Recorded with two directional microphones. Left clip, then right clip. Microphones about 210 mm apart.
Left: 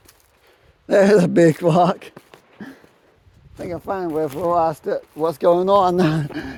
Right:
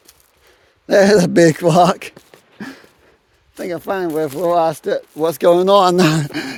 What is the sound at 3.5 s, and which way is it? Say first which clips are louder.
Speech: right 4 dB; 40° right (ahead or behind).